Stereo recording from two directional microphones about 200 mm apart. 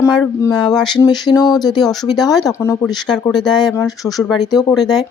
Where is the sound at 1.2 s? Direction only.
20° left (ahead or behind).